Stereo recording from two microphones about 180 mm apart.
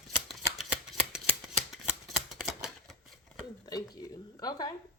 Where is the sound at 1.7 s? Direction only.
Centre (ahead or behind).